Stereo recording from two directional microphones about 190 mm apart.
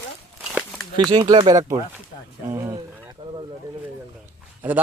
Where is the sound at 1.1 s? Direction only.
25° right (ahead or behind).